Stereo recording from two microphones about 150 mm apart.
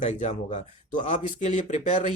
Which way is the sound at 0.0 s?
50° left (ahead or behind).